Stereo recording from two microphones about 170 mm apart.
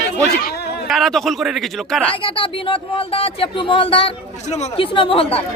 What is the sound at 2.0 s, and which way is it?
Speech, 30° left (ahead or behind).